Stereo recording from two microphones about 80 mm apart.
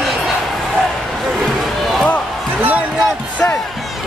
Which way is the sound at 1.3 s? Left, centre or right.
Centre.